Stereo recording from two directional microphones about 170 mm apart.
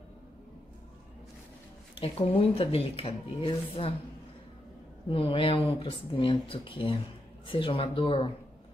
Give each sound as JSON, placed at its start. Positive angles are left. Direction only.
{"t": 2.0, "sound": "speech", "side_deg": 35}
{"t": 5.1, "sound": "speech", "side_deg": 30}